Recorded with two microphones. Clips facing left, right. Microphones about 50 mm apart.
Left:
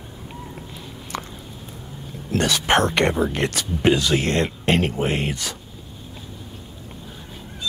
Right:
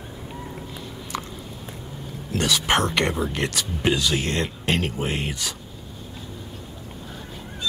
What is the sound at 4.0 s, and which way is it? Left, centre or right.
Speech, left.